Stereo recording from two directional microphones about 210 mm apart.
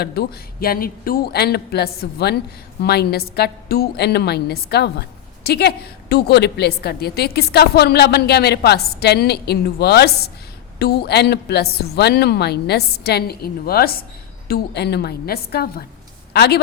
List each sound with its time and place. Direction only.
0.0 s a woman's voice: 45° left (ahead or behind)